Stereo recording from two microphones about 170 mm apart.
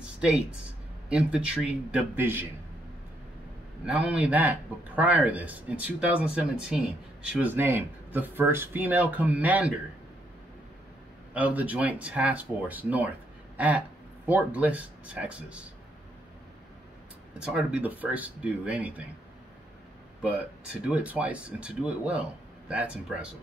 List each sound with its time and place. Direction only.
0.0 s a sound: 5° right (ahead or behind)
1.0 s speech: 5° right (ahead or behind)
3.8 s speech: 5° right (ahead or behind)
11.3 s speech: 10° right (ahead or behind)
17.3 s speech: 5° right (ahead or behind)
20.8 s speech: 5° right (ahead or behind)